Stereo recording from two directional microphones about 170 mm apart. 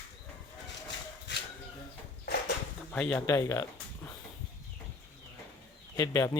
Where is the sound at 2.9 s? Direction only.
10° left (ahead or behind).